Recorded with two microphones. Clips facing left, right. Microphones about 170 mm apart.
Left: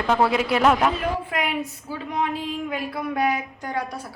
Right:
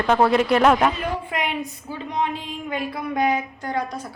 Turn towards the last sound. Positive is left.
turn(degrees=5)  # may be behind; listen again after turning